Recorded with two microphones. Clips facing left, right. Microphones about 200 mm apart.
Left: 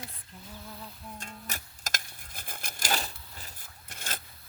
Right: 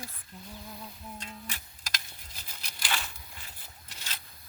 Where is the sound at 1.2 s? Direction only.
45° left (ahead or behind).